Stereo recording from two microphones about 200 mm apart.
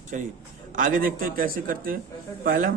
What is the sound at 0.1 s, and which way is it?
A man's voice, 40° right (ahead or behind).